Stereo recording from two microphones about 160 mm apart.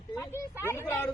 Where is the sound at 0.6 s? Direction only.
15° left (ahead or behind).